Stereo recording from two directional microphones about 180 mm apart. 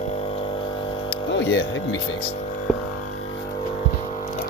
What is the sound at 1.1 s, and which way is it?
Music, 85° left.